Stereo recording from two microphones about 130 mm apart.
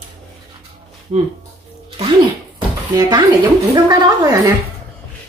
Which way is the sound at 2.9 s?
30° right (ahead or behind).